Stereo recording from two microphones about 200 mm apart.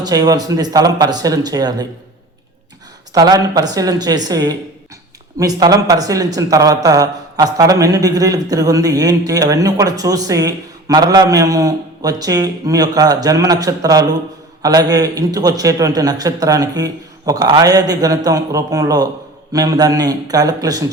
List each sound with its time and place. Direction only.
0.0 s speech: 20° right (ahead or behind)
3.2 s speech: 20° right (ahead or behind)